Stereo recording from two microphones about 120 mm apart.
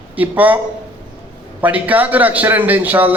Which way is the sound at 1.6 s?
15° right (ahead or behind).